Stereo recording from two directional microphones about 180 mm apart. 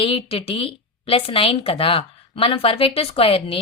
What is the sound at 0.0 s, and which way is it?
A woman's voice, 30° left (ahead or behind).